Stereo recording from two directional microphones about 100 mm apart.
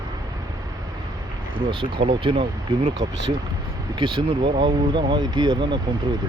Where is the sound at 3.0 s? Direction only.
45° right (ahead or behind).